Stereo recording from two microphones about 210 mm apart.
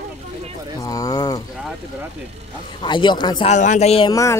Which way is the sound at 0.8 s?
15° left (ahead or behind).